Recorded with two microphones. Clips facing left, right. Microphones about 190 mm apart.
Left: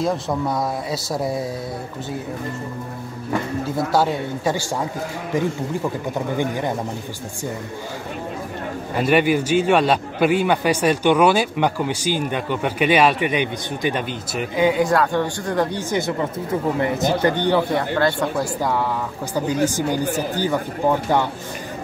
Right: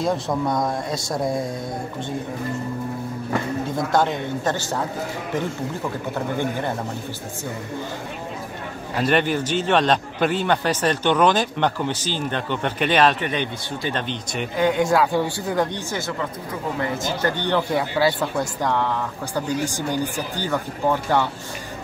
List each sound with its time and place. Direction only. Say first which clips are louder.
0.0 s speech: left 1 dB; centre (ahead or behind)
3.6 s a man's voice: left 2 dB; 5° left (ahead or behind)
8.9 s a man's voice: left 3 dB; 10° left (ahead or behind)
15.9 s a man's voice: left 5 dB; 20° left (ahead or behind)
17.6 s speech: left 1 dB; 5° right (ahead or behind)
18.6 s a man's voice: right 1 dB; 10° left (ahead or behind)
19.9 s a man's voice: left 3 dB; 10° left (ahead or behind)